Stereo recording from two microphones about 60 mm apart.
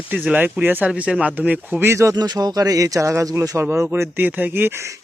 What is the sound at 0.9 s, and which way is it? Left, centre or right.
Speech, centre.